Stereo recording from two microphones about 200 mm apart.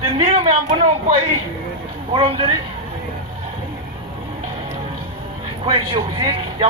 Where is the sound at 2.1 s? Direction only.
25° right (ahead or behind).